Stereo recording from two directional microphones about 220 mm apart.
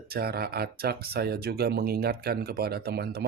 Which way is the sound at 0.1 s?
45° right (ahead or behind).